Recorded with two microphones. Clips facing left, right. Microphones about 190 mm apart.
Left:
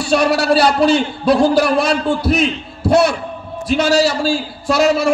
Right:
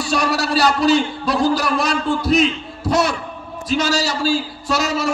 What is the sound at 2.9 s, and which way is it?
A man's voice, 40° right (ahead or behind).